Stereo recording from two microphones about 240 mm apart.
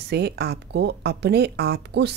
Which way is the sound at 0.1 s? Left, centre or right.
Right.